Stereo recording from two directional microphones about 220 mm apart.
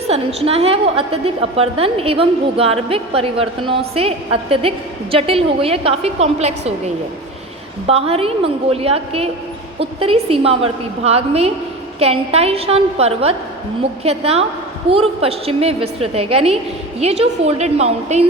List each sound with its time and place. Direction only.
0.1 s a woman's voice: 25° right (ahead or behind)